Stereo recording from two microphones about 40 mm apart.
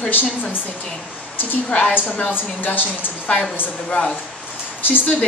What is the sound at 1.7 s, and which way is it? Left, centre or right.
Speech, left.